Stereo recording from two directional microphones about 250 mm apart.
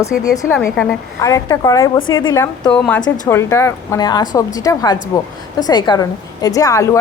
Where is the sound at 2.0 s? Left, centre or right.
Left.